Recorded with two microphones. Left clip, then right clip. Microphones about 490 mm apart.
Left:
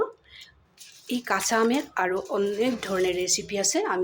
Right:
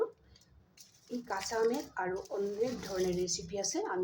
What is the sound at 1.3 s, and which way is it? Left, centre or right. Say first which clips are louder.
Speech: left 9 dB; centre.